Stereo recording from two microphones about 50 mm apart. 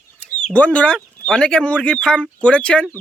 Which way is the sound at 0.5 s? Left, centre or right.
Left.